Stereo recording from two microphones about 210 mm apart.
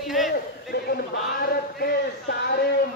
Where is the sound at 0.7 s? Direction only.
50° left (ahead or behind).